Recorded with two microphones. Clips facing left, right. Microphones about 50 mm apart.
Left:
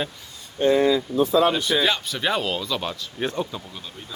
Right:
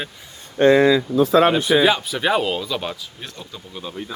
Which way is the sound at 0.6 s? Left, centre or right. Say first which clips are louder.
Right 6 dB; right.